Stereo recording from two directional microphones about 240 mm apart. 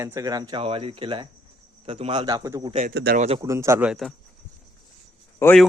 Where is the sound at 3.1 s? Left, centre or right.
Right.